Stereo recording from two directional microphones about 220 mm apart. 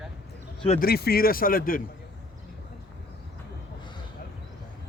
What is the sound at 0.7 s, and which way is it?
Speech, 45° left (ahead or behind).